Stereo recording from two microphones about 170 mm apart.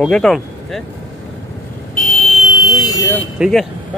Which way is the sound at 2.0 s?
35° left (ahead or behind).